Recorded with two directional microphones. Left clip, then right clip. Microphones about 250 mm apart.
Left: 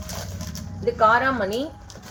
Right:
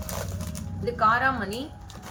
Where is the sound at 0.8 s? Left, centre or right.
Left.